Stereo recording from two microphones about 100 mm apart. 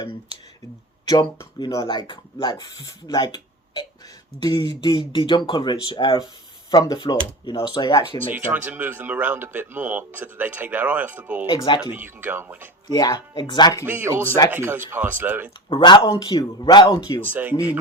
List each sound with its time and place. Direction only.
0.0 s speech: 55° left (ahead or behind)
8.3 s speech: 20° right (ahead or behind)
11.4 s speech: 55° left (ahead or behind)
11.9 s speech: 20° right (ahead or behind)
12.9 s speech: 40° left (ahead or behind)
13.8 s speech: 20° right (ahead or behind)
15.7 s speech: 50° left (ahead or behind)
17.3 s speech: 15° right (ahead or behind)